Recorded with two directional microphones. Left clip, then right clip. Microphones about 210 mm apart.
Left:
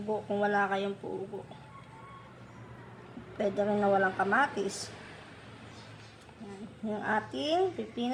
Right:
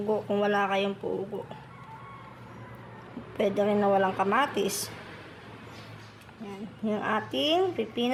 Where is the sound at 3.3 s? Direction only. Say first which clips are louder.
Right 4 dB; 35° right (ahead or behind).